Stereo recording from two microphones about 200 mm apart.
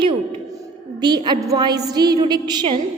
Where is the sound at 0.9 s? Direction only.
20° right (ahead or behind).